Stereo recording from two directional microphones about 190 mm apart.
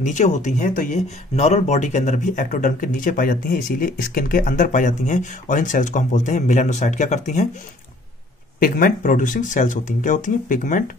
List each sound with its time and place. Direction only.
0.0 s speech: 40° left (ahead or behind)
8.5 s speech: 50° left (ahead or behind)